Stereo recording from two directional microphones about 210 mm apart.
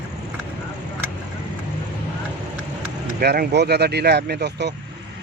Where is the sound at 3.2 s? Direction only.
50° right (ahead or behind).